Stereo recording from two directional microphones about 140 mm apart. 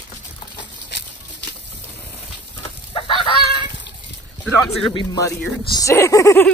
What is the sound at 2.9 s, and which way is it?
Fowl, 35° left (ahead or behind).